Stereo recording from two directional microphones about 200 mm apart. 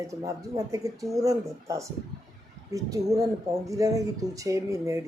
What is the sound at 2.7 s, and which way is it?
Speech, 15° right (ahead or behind).